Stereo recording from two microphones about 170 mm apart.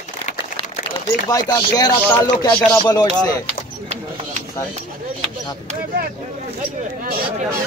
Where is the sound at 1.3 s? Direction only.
20° left (ahead or behind).